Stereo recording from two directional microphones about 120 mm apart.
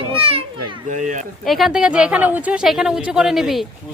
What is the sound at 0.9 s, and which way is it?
Speech, 90° right.